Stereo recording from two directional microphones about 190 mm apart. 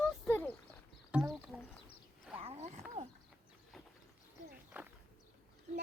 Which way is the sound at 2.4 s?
35° right (ahead or behind).